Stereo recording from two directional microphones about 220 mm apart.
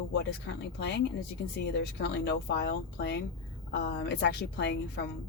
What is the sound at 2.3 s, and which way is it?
A woman's voice, 50° left (ahead or behind).